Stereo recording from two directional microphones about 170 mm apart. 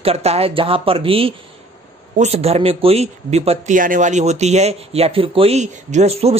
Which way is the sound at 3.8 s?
50° right (ahead or behind).